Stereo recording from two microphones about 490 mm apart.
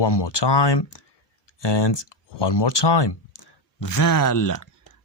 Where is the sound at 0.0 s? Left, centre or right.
Left.